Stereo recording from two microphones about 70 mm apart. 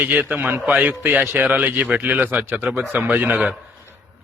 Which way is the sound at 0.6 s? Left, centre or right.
Centre.